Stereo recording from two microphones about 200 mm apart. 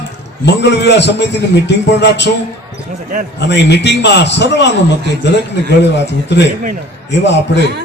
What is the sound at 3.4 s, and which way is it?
A man's voice, 60° left (ahead or behind).